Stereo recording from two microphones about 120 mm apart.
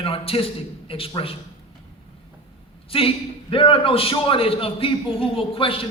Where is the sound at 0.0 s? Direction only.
50° left (ahead or behind).